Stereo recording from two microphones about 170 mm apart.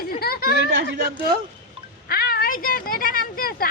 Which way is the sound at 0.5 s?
90° right.